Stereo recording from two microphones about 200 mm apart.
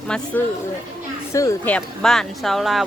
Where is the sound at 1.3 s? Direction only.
15° left (ahead or behind).